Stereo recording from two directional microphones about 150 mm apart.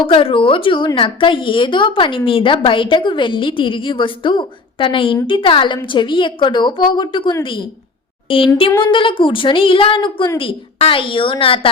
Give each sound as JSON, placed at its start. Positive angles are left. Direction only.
{"t": 0.1, "sound": "a woman's voice", "side_deg": 35}